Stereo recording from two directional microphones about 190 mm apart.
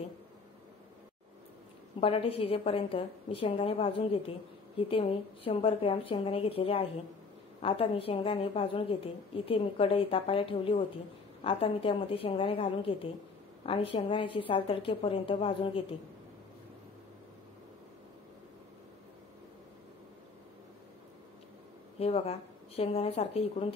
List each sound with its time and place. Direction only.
2.0 s a woman's voice: 30° left (ahead or behind)
21.9 s speech: 30° left (ahead or behind)